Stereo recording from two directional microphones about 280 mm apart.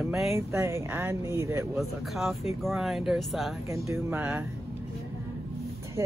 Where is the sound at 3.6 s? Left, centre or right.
Centre.